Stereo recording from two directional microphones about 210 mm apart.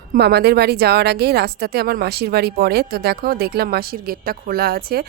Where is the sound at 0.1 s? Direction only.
50° right (ahead or behind).